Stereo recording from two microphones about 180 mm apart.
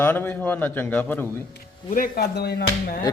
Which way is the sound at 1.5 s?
55° left (ahead or behind).